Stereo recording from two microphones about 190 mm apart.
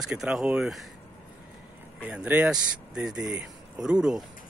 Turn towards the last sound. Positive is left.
turn(degrees=-5)  # may be behind; listen again after turning